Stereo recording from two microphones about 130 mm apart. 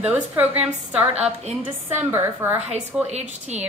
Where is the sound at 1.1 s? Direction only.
55° right (ahead or behind).